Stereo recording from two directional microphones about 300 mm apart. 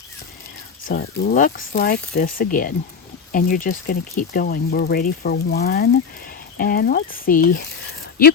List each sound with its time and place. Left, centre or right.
0.9 s speech: left